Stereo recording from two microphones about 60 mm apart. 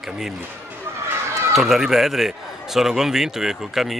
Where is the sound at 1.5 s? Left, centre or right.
Centre.